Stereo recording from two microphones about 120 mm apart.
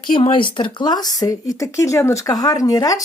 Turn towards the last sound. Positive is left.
turn(degrees=30)  # may be behind; listen again after turning